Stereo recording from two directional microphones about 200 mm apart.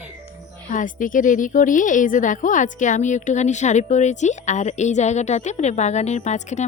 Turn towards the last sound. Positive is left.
turn(degrees=35)  # may be behind; listen again after turning